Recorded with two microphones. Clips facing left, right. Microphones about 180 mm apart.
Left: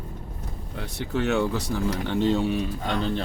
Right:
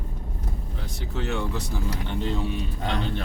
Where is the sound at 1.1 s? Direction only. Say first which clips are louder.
Left 6 dB; 70° left (ahead or behind).